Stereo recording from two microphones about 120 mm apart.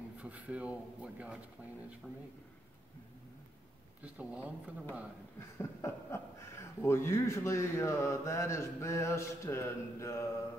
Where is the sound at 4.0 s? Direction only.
10° right (ahead or behind).